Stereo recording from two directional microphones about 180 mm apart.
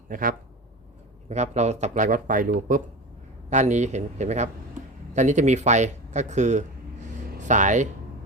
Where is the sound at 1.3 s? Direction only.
40° right (ahead or behind).